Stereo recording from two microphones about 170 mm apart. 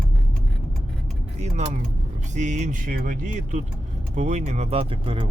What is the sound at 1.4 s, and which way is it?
Speech, 40° right (ahead or behind).